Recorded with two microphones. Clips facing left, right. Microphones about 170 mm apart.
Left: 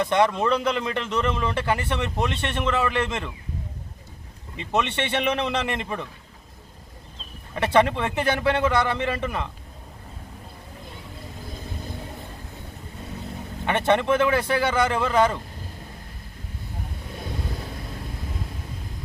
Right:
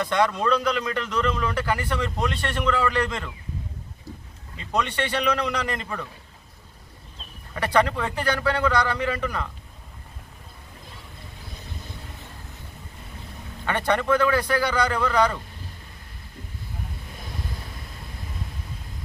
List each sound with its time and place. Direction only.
0.0 s speech: 20° left (ahead or behind)
4.5 s speech: 25° left (ahead or behind)
7.5 s speech: 25° left (ahead or behind)
13.7 s speech: 20° left (ahead or behind)